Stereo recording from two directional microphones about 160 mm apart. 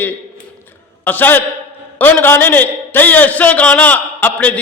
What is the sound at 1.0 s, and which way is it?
A man's voice, 10° left (ahead or behind).